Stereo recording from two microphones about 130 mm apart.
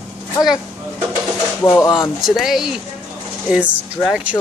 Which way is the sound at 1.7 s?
25° left (ahead or behind).